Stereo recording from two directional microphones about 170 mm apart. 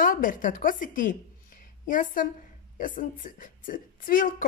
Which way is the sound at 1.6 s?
55° left (ahead or behind).